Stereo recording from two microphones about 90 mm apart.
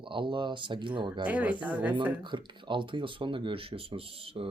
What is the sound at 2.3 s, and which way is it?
Speech, 65° right (ahead or behind).